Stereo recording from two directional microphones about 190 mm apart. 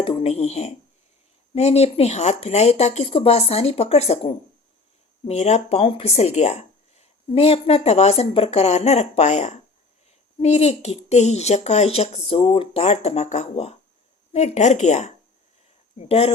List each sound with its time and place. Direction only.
0.0 s speech: 30° left (ahead or behind)